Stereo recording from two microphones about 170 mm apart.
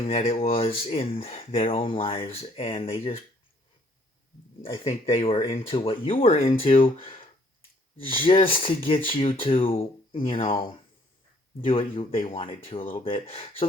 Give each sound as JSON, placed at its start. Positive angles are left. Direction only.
{"t": 0.0, "sound": "speech", "side_deg": 35}
{"t": 4.6, "sound": "speech", "side_deg": 30}
{"t": 7.9, "sound": "speech", "side_deg": 30}
{"t": 11.6, "sound": "speech", "side_deg": 35}